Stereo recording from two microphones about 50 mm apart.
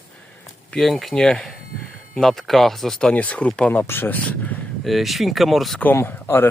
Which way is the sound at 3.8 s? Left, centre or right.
Left.